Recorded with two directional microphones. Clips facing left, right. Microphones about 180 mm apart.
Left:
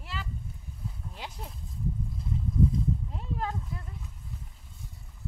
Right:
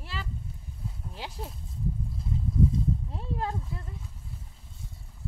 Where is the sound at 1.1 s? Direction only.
30° right (ahead or behind).